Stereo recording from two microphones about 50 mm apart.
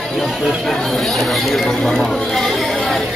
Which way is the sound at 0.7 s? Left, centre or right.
Centre.